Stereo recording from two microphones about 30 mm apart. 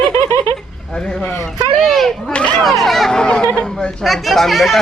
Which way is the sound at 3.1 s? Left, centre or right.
Left.